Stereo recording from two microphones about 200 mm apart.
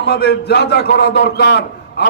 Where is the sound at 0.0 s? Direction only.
55° left (ahead or behind).